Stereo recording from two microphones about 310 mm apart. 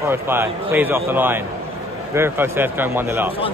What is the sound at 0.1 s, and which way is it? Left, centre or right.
A man's voice, centre.